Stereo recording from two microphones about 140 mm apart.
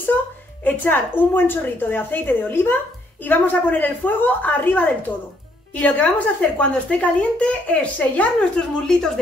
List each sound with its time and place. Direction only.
0.7 s speech: 15° left (ahead or behind)